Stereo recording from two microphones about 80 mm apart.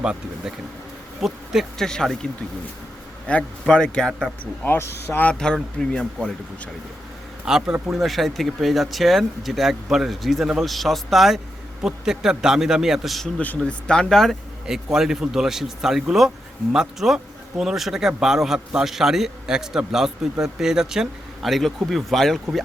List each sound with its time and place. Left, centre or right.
0.0 s a man's voice: centre
1.9 s a man's voice: centre
3.2 s a man's voice: centre
4.8 s speech: left
5.2 s a man's voice: centre
7.4 s a man's voice: centre
13.6 s a man's voice: centre
14.9 s a man's voice: centre